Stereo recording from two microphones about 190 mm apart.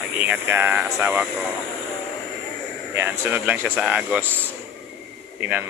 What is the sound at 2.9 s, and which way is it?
Speech, 10° right (ahead or behind).